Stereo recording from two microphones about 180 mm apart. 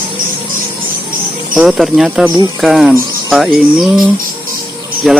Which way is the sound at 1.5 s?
5° right (ahead or behind).